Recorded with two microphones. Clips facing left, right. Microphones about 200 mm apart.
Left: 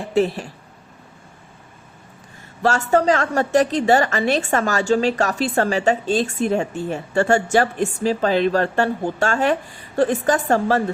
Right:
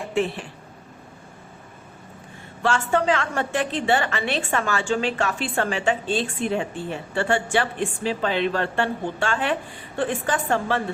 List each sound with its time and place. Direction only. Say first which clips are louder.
0.0 s a woman's voice: left 5 dB; 40° left (ahead or behind)
2.6 s a woman's voice: left 4 dB; 40° left (ahead or behind)